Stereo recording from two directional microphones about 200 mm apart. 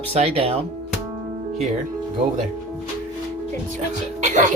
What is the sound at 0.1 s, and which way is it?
Speech, 30° right (ahead or behind).